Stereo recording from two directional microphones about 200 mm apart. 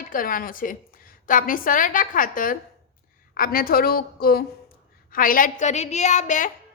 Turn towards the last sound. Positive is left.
turn(degrees=40)  # may be behind; listen again after turning